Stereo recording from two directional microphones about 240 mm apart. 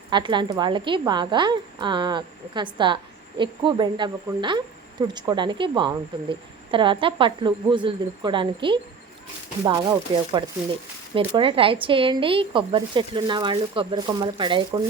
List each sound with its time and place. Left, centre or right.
0.1 s a woman's voice: centre